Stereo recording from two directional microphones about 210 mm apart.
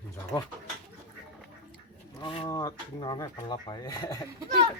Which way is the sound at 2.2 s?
25° left (ahead or behind).